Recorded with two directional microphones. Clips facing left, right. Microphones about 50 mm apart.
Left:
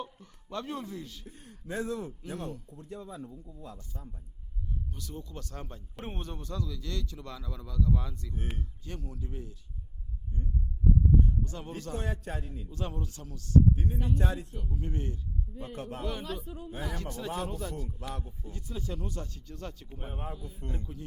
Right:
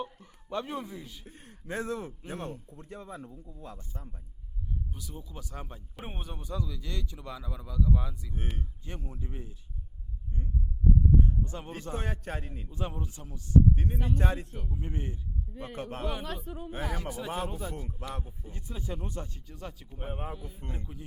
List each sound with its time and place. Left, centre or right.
0.0 s a sound: centre
1.4 s a sound: right
1.7 s a man's voice: right
3.8 s a man's voice: right
4.9 s speech: centre
8.5 s speech: right
11.3 s a sound: right
11.9 s a man's voice: right
12.6 s speech: centre
13.7 s speech: right
14.7 s speech: centre
15.5 s speech: right
16.2 s speech: right
16.9 s speech: centre